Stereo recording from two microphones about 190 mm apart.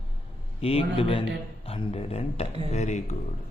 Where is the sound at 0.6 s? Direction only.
30° left (ahead or behind).